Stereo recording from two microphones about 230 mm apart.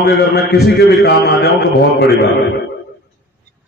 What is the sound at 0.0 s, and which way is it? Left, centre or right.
A man's voice, left.